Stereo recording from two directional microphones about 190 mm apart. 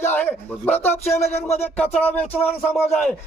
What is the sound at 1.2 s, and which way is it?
Music, 35° left (ahead or behind).